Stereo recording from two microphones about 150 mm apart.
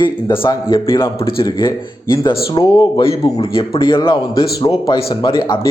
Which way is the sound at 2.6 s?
30° left (ahead or behind).